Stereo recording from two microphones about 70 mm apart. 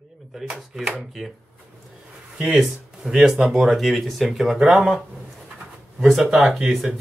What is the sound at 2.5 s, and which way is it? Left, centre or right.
Speech, centre.